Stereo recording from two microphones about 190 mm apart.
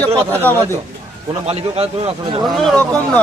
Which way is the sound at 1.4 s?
35° right (ahead or behind).